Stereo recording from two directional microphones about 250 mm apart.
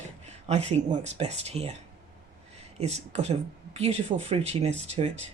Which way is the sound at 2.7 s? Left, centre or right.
Right.